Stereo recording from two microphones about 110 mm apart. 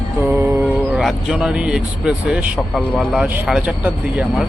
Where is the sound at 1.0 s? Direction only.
5° right (ahead or behind).